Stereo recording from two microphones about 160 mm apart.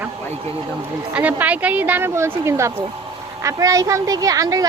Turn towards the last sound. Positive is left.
turn(degrees=-20)  # may be behind; listen again after turning